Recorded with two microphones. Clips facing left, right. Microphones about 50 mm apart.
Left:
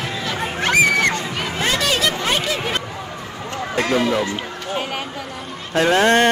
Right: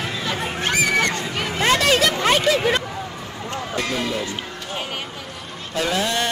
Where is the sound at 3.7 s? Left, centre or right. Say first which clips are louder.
Left 7 dB; left.